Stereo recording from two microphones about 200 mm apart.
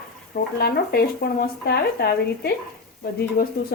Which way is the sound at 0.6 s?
50° left (ahead or behind).